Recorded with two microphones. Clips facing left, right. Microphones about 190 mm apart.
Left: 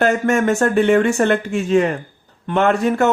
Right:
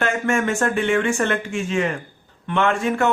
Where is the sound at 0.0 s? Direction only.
40° left (ahead or behind).